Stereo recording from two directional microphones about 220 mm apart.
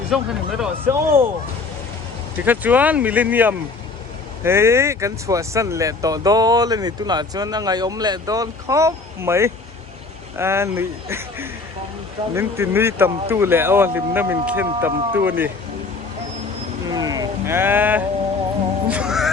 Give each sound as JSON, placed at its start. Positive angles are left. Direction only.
{"t": 0.1, "sound": "speech", "side_deg": 0}
{"t": 2.4, "sound": "speech", "side_deg": -5}
{"t": 16.9, "sound": "a sound", "side_deg": -15}
{"t": 18.9, "sound": "music", "side_deg": -5}